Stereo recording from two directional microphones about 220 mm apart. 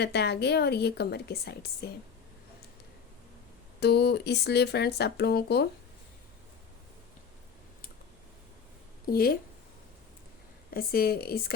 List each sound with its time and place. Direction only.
0.0 s a woman's voice: 50° left (ahead or behind)
3.8 s a woman's voice: 45° left (ahead or behind)
9.0 s a woman's voice: 45° left (ahead or behind)
10.7 s a woman's voice: 45° left (ahead or behind)